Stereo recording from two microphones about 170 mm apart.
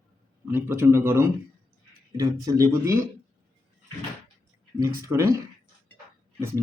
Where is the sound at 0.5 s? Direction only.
15° right (ahead or behind).